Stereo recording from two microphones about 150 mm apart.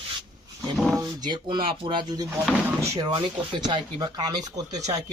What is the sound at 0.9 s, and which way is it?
A man's voice, 30° right (ahead or behind).